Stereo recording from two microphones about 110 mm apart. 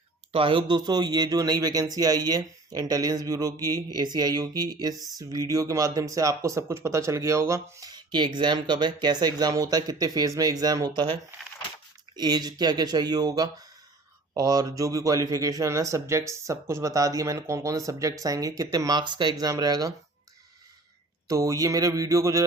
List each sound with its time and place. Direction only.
0.3 s speech: 50° right (ahead or behind); by 7.9 s 25° right (ahead or behind)
7.9 s speech: 40° right (ahead or behind)
21.2 s speech: 30° right (ahead or behind)